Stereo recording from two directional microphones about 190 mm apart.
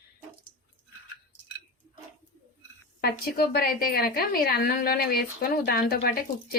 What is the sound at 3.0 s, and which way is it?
A woman's voice, 55° left (ahead or behind).